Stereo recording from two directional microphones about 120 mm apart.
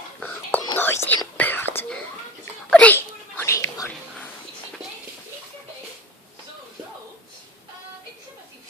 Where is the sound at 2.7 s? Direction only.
10° left (ahead or behind).